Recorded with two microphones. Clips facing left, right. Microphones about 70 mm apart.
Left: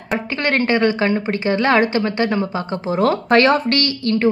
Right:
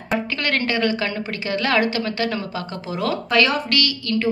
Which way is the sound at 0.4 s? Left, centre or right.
Left.